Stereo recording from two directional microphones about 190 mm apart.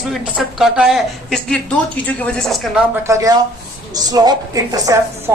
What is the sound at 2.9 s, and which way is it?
A woman's voice, 15° right (ahead or behind).